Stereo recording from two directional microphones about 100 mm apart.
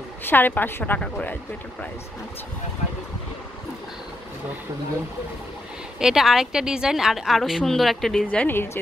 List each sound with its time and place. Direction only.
0.2 s a woman's voice: 20° left (ahead or behind)
5.9 s a woman's voice: 5° right (ahead or behind)
8.3 s a woman's voice: 15° left (ahead or behind)